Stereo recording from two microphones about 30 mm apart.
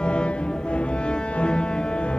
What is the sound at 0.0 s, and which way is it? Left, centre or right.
Music, left.